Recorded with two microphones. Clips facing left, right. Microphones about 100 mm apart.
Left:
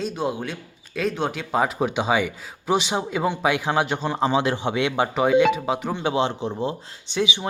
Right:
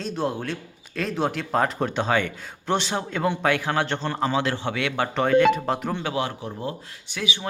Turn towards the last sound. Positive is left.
turn(degrees=20)  # may be behind; listen again after turning